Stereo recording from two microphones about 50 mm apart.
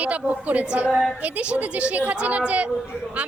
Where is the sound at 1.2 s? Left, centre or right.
Right.